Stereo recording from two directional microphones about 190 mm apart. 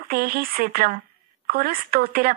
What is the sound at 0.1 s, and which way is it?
A woman's voice, 50° right (ahead or behind).